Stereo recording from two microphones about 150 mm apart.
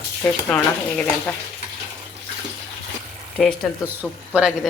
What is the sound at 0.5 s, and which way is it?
Speech, 10° left (ahead or behind).